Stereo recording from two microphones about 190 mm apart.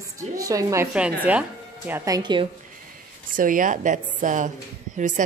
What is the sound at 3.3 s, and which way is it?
Speech, 45° right (ahead or behind).